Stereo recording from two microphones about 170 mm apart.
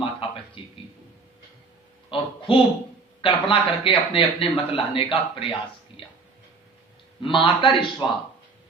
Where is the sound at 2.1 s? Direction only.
30° left (ahead or behind).